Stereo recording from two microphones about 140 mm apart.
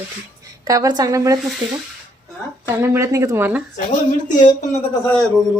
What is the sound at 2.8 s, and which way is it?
Speech, 20° right (ahead or behind).